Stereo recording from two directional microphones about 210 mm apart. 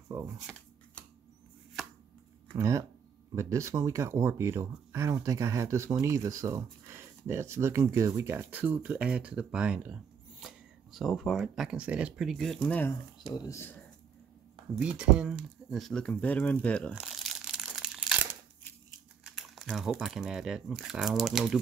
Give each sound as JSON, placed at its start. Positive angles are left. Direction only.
{"t": 0.1, "sound": "speech", "side_deg": -10}
{"t": 2.5, "sound": "speech", "side_deg": -15}
{"t": 14.8, "sound": "speech", "side_deg": -5}
{"t": 16.9, "sound": "crumpling", "side_deg": 0}
{"t": 19.2, "sound": "speech", "side_deg": 0}